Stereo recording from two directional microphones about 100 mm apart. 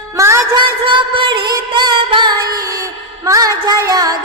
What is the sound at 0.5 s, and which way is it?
Music, 55° right (ahead or behind).